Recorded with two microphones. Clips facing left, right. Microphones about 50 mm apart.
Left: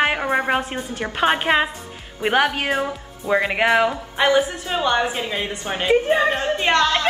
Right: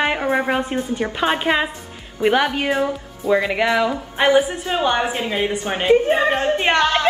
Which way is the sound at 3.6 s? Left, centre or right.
Left.